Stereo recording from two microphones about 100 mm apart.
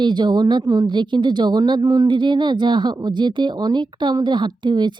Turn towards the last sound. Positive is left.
turn(degrees=-50)  # may be behind; listen again after turning